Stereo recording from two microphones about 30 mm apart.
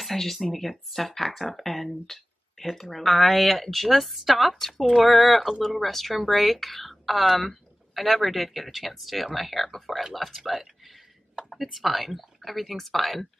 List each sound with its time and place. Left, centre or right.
0.0 s speech: centre